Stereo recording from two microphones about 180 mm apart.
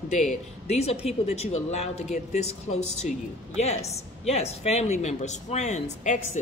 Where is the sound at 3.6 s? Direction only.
35° left (ahead or behind).